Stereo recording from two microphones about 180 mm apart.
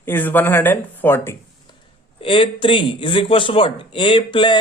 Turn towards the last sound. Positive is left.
turn(degrees=25)  # may be behind; listen again after turning